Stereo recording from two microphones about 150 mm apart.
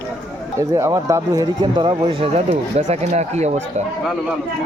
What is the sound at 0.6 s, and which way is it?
Speech, 20° right (ahead or behind).